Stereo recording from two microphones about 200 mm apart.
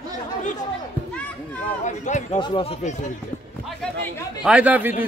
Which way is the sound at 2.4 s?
25° left (ahead or behind).